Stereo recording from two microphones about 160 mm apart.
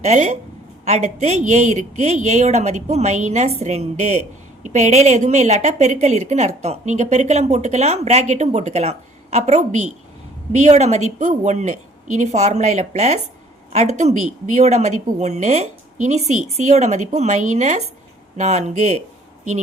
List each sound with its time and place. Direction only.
0.0 s a woman's voice: 45° right (ahead or behind)